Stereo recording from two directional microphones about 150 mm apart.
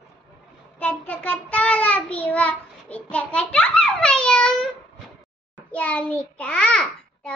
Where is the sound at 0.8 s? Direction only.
10° left (ahead or behind).